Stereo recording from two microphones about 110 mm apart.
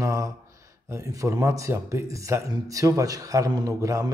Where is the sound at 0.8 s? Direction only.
30° right (ahead or behind).